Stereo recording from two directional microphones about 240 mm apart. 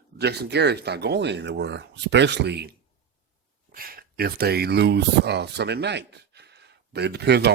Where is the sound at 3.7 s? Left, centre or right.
Right.